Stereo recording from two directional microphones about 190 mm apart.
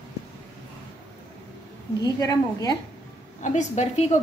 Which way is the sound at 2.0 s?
20° left (ahead or behind).